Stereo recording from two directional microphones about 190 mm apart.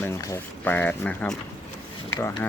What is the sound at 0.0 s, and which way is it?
Speech, 15° left (ahead or behind).